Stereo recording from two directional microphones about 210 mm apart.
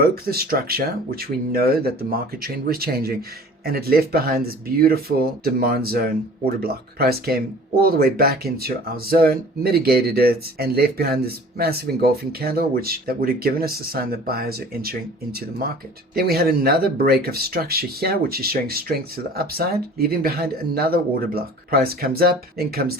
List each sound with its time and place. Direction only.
0.0 s speech: 45° right (ahead or behind)